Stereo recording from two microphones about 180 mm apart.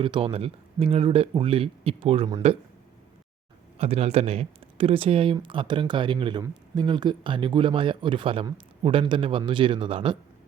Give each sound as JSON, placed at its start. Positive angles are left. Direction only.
{"t": 0.0, "sound": "speech", "side_deg": -30}
{"t": 3.8, "sound": "speech", "side_deg": -35}